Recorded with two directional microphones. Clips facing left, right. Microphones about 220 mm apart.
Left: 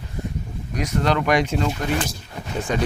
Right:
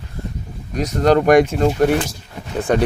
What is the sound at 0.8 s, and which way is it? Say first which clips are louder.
Speech: right 7 dB; 45° right (ahead or behind).